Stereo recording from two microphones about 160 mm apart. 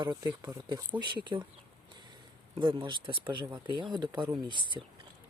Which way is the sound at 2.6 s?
30° right (ahead or behind).